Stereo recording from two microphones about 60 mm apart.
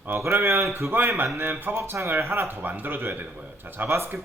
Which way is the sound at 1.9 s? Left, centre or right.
Right.